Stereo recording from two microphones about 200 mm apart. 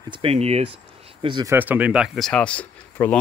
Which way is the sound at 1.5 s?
10° right (ahead or behind).